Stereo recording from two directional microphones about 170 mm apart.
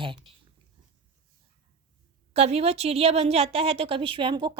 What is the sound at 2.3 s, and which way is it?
A woman's voice, 40° right (ahead or behind).